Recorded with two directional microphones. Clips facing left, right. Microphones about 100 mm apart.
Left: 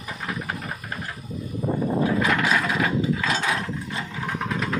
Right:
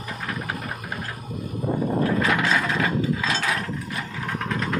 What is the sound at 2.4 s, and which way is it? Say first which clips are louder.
Sewing machine: even; 5° left (ahead or behind).